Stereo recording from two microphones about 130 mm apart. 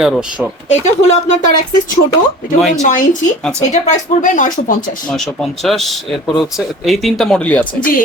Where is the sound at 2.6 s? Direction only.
Centre (ahead or behind).